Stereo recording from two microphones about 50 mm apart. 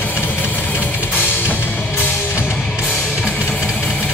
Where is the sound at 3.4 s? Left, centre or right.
Left.